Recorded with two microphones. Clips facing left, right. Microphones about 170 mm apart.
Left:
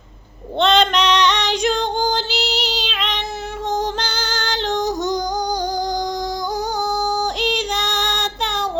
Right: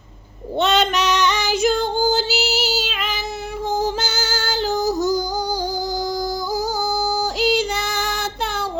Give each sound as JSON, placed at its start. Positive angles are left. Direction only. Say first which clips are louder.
{"t": 0.6, "sound": "female singing", "louder": "left 2 dB", "side_deg": -5}
{"t": 7.3, "sound": "female singing", "louder": "right 2 dB", "side_deg": -5}